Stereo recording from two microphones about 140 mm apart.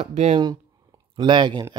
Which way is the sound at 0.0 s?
55° right (ahead or behind).